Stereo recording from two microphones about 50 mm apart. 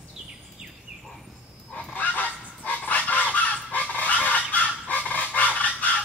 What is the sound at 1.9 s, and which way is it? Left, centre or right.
Goose, left.